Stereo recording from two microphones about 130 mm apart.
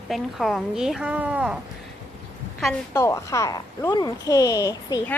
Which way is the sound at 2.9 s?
20° left (ahead or behind).